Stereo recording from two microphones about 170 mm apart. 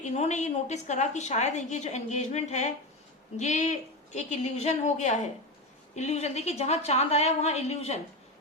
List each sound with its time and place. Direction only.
0.0 s a woman's voice: 45° left (ahead or behind)